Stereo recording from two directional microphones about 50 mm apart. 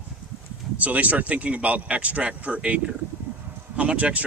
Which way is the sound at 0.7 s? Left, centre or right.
Right.